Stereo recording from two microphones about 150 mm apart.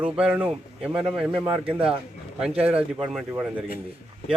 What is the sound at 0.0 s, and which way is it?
Speech, 10° right (ahead or behind).